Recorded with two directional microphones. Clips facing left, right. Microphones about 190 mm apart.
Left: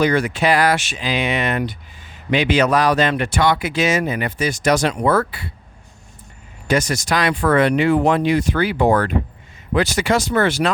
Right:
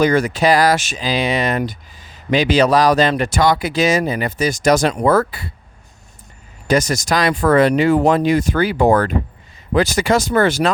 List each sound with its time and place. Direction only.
0.0 s speech: 45° right (ahead or behind)
6.7 s speech: 40° right (ahead or behind)